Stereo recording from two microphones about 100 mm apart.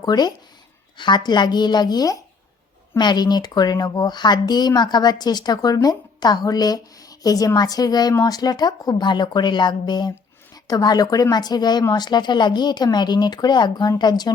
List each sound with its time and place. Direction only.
0.0 s a woman's voice: 45° left (ahead or behind)